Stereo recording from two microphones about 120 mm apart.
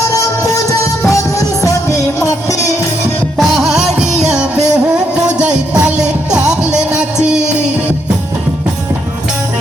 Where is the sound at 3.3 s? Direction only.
Centre (ahead or behind).